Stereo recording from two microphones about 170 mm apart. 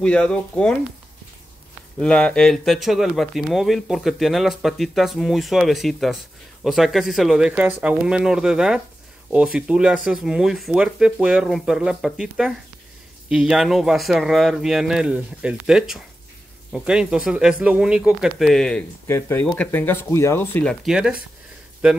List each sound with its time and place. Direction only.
0.0 s speech: 5° left (ahead or behind)
2.0 s speech: 5° left (ahead or behind)
19.0 s speech: 15° left (ahead or behind)
20.8 s speech: 5° right (ahead or behind)